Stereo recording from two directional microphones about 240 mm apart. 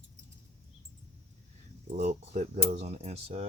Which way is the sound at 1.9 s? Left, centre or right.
Right.